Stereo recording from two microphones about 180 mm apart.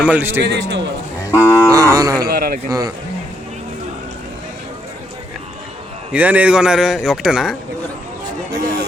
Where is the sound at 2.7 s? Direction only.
20° right (ahead or behind).